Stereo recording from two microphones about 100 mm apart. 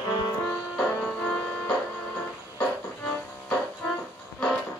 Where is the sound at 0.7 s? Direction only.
10° left (ahead or behind).